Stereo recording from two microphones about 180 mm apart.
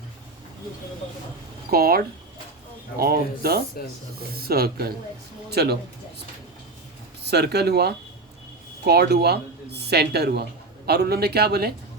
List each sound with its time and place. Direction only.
1.7 s speech: 55° right (ahead or behind)
3.0 s speech: 60° right (ahead or behind)
7.3 s speech: 65° right (ahead or behind)